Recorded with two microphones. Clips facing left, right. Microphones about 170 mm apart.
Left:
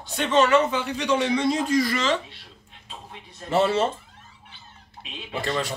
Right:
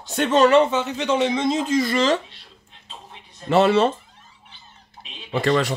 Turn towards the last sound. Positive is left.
turn(degrees=-70)  # may be behind; listen again after turning